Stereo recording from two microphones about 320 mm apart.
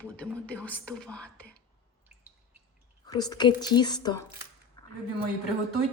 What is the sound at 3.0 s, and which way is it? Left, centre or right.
A woman's voice, centre.